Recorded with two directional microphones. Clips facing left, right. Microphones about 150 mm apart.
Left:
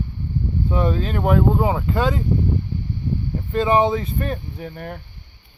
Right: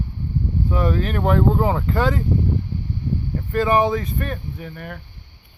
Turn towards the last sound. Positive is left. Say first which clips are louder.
# left 1 dB
turn(degrees=30)  # may be behind; listen again after turning